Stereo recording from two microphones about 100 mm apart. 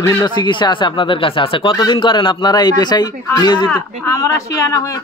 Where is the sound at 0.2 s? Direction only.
45° left (ahead or behind).